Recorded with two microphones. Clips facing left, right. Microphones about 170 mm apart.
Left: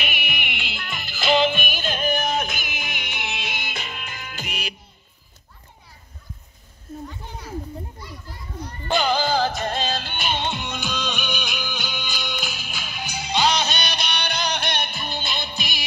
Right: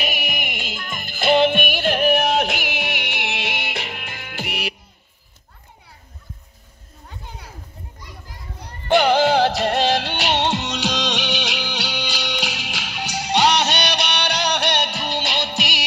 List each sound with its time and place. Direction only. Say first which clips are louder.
0.0 s music: right 4 dB; 40° right (ahead or behind); by 4.7 s 65° right (ahead or behind)
8.9 s music: right 6 dB; 70° right (ahead or behind)